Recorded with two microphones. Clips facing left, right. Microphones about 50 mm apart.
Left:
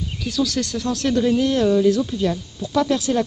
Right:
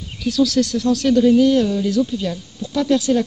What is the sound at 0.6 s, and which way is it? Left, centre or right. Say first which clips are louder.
Speech: right 6 dB; left.